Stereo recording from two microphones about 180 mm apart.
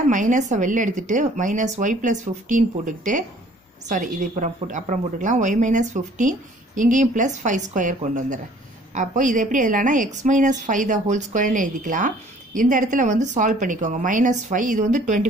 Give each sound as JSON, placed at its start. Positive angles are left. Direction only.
{"t": 0.1, "sound": "speech", "side_deg": -45}